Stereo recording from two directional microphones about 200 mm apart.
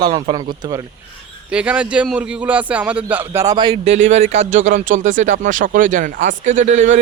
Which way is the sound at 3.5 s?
25° right (ahead or behind).